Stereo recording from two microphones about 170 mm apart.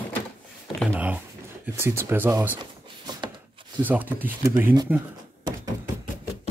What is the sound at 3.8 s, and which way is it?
Speech, 10° right (ahead or behind).